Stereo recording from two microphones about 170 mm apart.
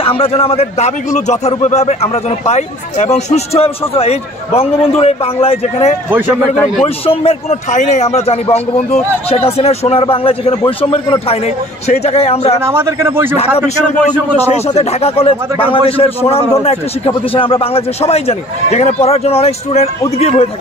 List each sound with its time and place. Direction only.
0.0 s speech: 35° left (ahead or behind)
6.0 s speech: 10° right (ahead or behind)
6.8 s speech: 35° left (ahead or behind)
12.6 s speech: 15° right (ahead or behind)
14.7 s speech: 35° left (ahead or behind)